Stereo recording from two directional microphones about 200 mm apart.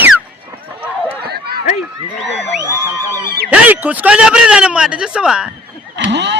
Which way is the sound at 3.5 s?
10° right (ahead or behind).